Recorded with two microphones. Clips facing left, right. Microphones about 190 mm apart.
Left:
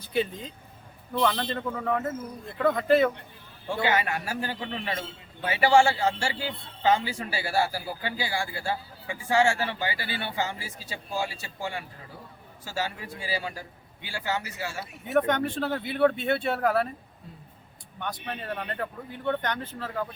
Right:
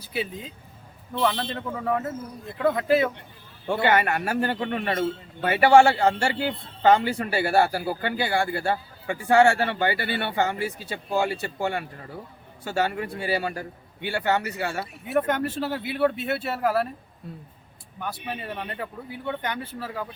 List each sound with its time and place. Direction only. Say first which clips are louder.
0.0 s speech: left 3 dB; 5° right (ahead or behind)
3.8 s a man's voice: right 5 dB; 60° right (ahead or behind)
15.3 s speech: right 1 dB; 5° right (ahead or behind)
18.0 s speech: right 2 dB; 10° right (ahead or behind)